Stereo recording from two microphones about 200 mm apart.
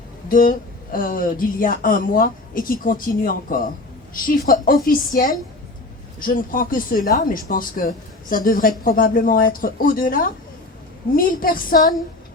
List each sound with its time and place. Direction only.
0.3 s speech: 45° left (ahead or behind)